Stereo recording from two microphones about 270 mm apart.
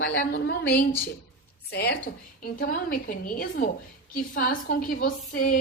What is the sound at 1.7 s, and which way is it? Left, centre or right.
A woman's voice, left.